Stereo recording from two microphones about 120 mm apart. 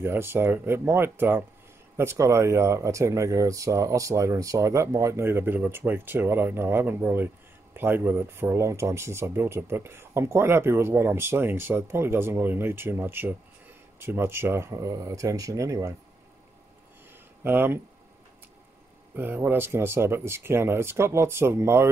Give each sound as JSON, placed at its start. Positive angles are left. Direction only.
{"t": 0.0, "sound": "speech", "side_deg": -20}
{"t": 17.4, "sound": "speech", "side_deg": -15}
{"t": 19.1, "sound": "speech", "side_deg": -15}